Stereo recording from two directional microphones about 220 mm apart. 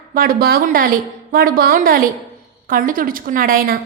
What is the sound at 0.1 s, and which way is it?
A woman's voice, 40° right (ahead or behind).